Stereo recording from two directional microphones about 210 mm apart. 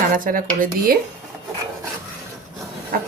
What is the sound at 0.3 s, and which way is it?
Speech, 40° right (ahead or behind).